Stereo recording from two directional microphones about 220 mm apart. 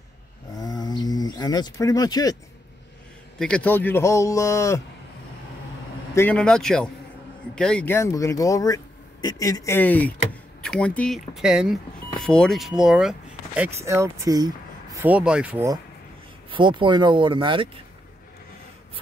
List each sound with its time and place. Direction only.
0.6 s a sound: 20° left (ahead or behind)
3.3 s speech: 5° left (ahead or behind)
6.1 s speech: 5° left (ahead or behind); by 15.8 s 10° right (ahead or behind)
16.4 s speech: 20° right (ahead or behind)